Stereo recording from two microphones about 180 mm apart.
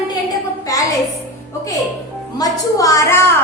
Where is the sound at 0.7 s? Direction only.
20° left (ahead or behind).